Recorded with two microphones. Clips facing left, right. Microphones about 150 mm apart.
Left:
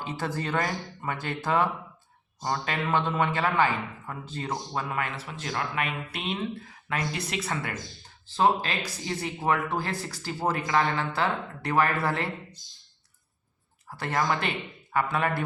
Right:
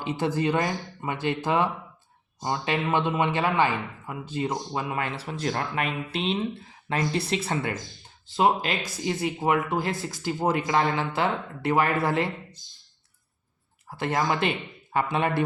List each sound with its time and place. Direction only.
0.0 s speech: 15° right (ahead or behind)
5.0 s speech: 35° right (ahead or behind)
8.3 s speech: 15° right (ahead or behind)
13.8 s speech: 20° right (ahead or behind)